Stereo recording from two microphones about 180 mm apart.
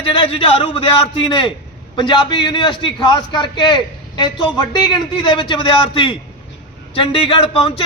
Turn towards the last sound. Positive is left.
turn(degrees=30)  # may be behind; listen again after turning